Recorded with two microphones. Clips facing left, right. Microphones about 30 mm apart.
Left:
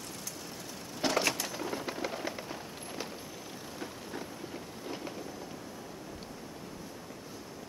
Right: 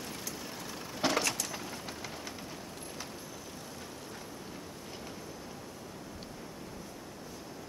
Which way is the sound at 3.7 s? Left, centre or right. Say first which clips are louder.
Left 4 dB; centre.